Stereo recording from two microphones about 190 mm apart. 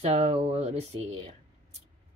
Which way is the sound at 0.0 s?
35° right (ahead or behind).